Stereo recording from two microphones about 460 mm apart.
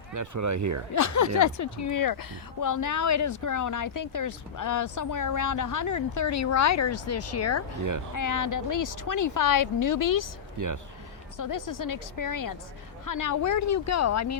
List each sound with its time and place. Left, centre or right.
0.1 s speech: right
0.9 s speech: left
10.6 s speech: right
11.3 s a woman's voice: left